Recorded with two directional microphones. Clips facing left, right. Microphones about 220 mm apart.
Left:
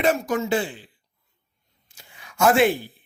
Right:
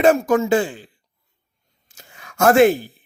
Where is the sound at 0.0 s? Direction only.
50° right (ahead or behind).